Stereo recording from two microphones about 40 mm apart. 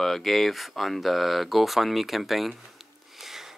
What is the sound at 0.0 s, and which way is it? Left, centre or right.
Speech, centre.